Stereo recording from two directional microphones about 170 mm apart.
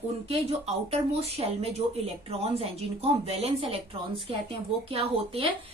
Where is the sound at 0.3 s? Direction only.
35° right (ahead or behind).